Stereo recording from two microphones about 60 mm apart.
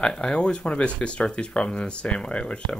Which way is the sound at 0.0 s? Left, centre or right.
Centre.